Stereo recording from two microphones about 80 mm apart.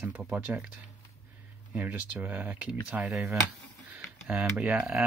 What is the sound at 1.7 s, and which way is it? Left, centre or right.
Speech, centre.